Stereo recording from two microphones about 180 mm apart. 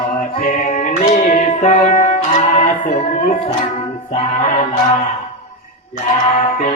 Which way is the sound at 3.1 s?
45° left (ahead or behind).